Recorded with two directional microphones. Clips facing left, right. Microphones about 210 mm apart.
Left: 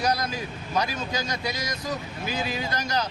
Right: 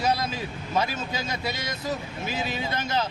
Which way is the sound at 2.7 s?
25° right (ahead or behind).